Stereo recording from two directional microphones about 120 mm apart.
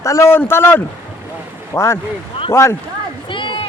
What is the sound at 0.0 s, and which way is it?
A man's voice, 25° left (ahead or behind).